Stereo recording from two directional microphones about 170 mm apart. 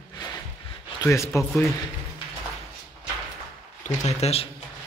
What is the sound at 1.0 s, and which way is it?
Speech, 15° left (ahead or behind).